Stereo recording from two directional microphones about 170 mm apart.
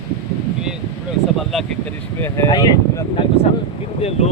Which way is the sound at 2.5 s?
25° left (ahead or behind).